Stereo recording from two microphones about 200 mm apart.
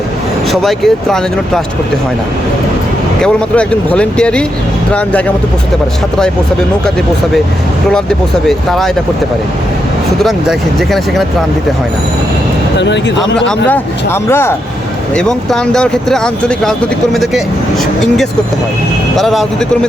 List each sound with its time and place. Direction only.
0.5 s speech: centre (ahead or behind)
3.2 s speech: 5° left (ahead or behind)
8.4 s speech: centre (ahead or behind)
10.2 s speech: centre (ahead or behind)
12.8 s speech: 65° left (ahead or behind)
13.7 s speech: 10° left (ahead or behind)
19.1 s speech: centre (ahead or behind)